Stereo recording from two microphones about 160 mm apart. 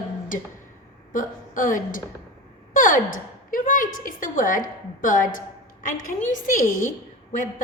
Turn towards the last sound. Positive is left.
turn(degrees=55)  # may be behind; listen again after turning